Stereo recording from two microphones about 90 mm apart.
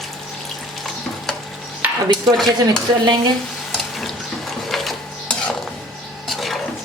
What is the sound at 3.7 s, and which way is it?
Water, centre (ahead or behind).